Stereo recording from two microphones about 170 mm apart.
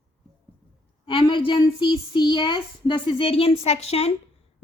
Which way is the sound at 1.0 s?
30° left (ahead or behind).